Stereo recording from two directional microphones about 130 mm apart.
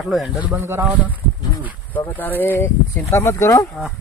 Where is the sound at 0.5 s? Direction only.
20° right (ahead or behind).